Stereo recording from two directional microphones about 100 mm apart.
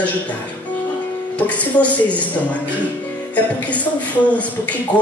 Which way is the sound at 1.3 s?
15° left (ahead or behind).